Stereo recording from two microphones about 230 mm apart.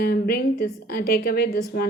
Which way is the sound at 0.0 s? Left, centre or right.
Left.